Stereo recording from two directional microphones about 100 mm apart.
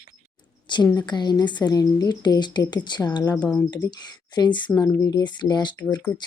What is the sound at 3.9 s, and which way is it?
A woman's voice, 45° left (ahead or behind).